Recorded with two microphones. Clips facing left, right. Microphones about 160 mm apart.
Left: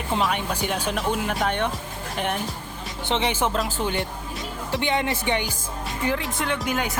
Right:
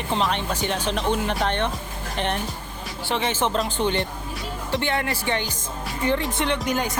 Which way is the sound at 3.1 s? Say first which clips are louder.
Even; 15° left (ahead or behind).